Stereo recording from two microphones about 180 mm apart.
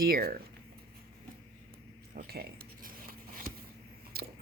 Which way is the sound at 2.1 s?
60° right (ahead or behind).